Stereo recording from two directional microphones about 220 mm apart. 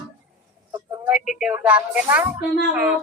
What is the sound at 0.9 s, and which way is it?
Speech, 5° right (ahead or behind).